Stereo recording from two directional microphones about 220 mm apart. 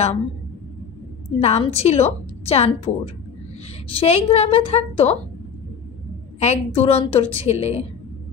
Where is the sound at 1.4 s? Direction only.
30° left (ahead or behind).